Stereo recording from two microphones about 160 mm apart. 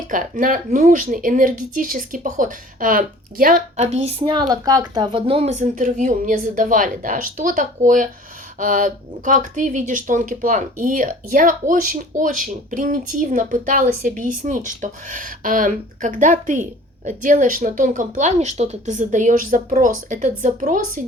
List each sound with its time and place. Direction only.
0.1 s speech: 55° right (ahead or behind)
4.2 s a woman's voice: 30° right (ahead or behind); by 21.0 s 55° right (ahead or behind)